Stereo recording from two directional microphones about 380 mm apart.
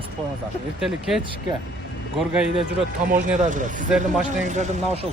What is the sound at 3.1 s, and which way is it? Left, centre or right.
Speech, centre.